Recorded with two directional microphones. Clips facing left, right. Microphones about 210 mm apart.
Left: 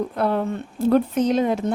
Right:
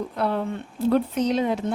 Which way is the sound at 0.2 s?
50° left (ahead or behind).